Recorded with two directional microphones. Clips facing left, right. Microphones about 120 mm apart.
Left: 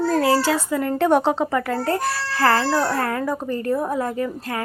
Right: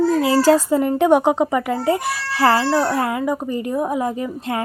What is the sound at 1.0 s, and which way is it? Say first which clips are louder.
Speech: right 2 dB; 15° right (ahead or behind).